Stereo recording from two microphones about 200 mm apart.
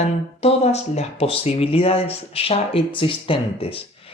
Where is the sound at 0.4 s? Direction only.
30° left (ahead or behind).